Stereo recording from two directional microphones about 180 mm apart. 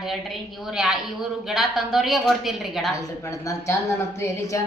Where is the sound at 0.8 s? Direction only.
Centre (ahead or behind).